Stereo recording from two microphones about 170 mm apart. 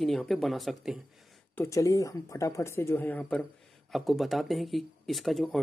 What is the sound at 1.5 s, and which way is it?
Speech, 15° left (ahead or behind).